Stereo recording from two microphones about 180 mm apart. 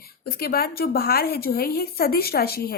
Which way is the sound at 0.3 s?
55° left (ahead or behind).